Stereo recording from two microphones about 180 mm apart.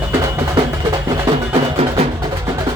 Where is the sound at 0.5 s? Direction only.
20° right (ahead or behind).